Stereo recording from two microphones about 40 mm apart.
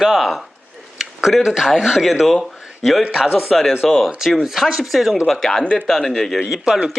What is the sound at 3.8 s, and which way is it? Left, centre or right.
Speech, centre.